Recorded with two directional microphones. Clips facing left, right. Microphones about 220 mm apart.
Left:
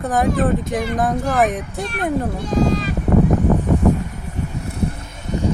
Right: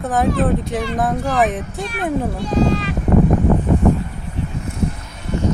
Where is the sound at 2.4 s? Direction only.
45° left (ahead or behind).